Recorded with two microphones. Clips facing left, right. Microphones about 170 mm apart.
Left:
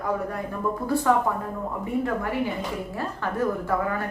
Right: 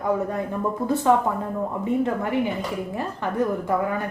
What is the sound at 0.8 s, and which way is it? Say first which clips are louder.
A woman's voice: right 2 dB; 20° right (ahead or behind).